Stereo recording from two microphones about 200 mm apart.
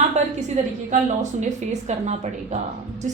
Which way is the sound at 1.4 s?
35° right (ahead or behind).